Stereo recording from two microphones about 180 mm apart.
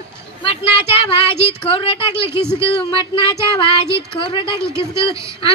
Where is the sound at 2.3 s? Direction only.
15° right (ahead or behind).